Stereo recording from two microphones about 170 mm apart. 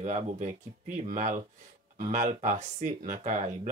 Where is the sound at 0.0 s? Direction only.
45° right (ahead or behind).